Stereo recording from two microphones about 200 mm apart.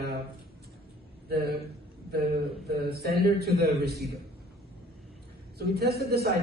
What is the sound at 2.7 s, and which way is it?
A man's voice, 50° right (ahead or behind).